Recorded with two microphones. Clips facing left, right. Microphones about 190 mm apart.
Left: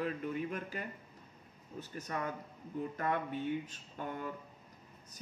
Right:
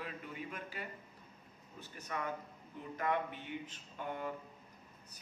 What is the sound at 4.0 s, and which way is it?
Speech, 45° left (ahead or behind).